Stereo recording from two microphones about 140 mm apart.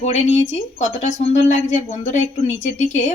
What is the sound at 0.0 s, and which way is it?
Speech, 55° left (ahead or behind).